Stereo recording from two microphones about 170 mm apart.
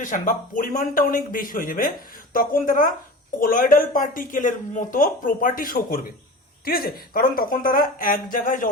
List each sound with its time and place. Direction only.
0.0 s speech: 50° left (ahead or behind)